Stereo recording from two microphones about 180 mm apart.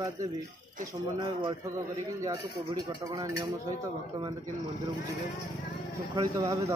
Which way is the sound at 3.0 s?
15° right (ahead or behind).